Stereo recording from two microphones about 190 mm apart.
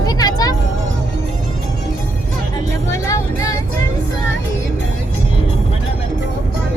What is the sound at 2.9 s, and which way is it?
Music, 15° left (ahead or behind).